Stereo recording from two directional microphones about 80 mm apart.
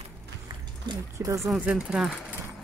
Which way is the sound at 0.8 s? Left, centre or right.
Right.